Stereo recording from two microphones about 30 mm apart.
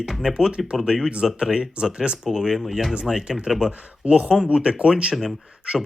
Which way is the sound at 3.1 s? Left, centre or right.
Right.